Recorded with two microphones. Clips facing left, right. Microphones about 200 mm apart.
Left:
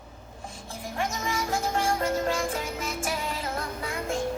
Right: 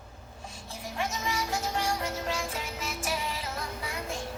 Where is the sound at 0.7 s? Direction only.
50° left (ahead or behind).